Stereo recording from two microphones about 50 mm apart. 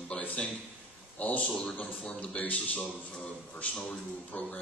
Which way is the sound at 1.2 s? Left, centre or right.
Left.